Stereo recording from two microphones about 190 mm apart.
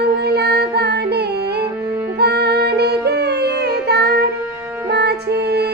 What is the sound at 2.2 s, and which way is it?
Music, 60° right (ahead or behind).